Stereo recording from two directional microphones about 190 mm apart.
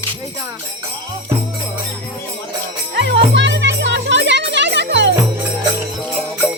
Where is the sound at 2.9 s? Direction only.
65° right (ahead or behind).